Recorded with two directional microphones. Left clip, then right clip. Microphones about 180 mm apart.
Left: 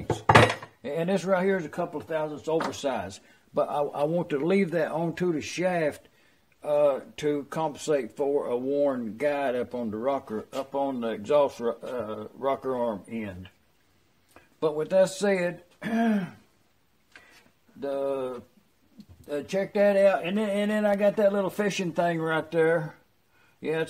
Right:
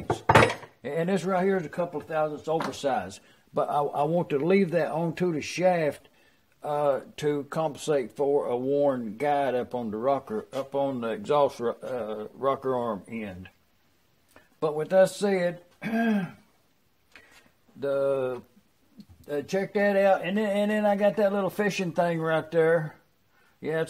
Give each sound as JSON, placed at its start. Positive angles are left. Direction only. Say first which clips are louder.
{"t": 0.8, "sound": "speech", "louder": "left 1 dB", "side_deg": -25}
{"t": 14.6, "sound": "speech", "louder": "right 1 dB", "side_deg": -25}
{"t": 17.7, "sound": "speech", "louder": "right 3 dB", "side_deg": -35}